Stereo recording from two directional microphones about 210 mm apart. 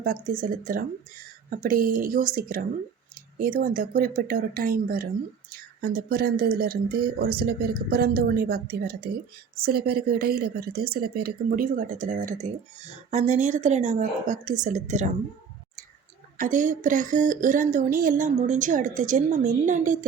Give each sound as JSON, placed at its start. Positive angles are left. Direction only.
{"t": 0.0, "sound": "speech", "side_deg": -40}
{"t": 16.4, "sound": "speech", "side_deg": -35}